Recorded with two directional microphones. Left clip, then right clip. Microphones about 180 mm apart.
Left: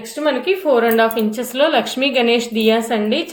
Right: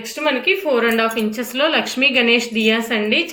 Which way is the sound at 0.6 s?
30° left (ahead or behind).